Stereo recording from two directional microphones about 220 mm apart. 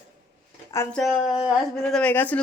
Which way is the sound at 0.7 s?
10° left (ahead or behind).